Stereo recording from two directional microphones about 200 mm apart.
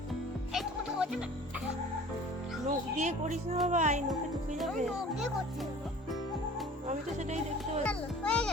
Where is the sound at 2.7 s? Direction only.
35° right (ahead or behind).